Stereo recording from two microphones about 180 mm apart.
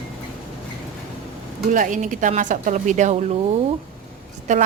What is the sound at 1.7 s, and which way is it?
Speech, 45° right (ahead or behind).